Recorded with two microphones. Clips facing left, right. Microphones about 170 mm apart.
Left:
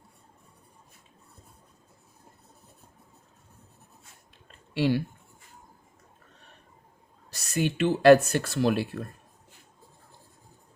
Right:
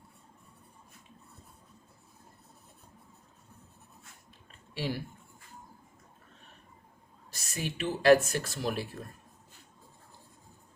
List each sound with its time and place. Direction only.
4.7 s speech: 70° left (ahead or behind)
7.3 s speech: 70° left (ahead or behind)